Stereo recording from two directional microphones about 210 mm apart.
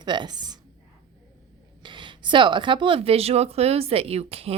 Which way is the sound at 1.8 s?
20° right (ahead or behind).